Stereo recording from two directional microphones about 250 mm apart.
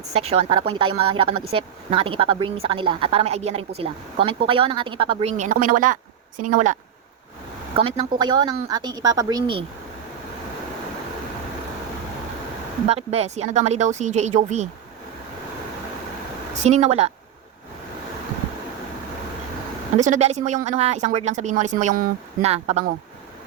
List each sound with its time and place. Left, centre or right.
0.1 s speech: right
7.8 s a woman's voice: right
12.9 s speech: right
16.6 s speech: right
20.0 s speech: right